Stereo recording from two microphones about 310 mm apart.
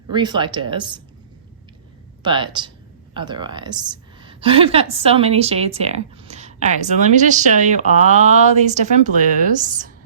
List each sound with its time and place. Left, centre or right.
0.1 s speech: centre
2.2 s a woman's voice: centre